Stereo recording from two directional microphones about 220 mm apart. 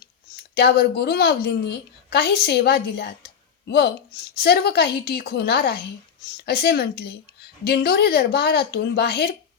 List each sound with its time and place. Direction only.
0.5 s a woman's voice: 45° left (ahead or behind)